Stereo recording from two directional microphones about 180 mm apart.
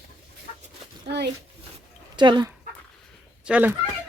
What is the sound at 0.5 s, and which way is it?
Chicken, 45° left (ahead or behind).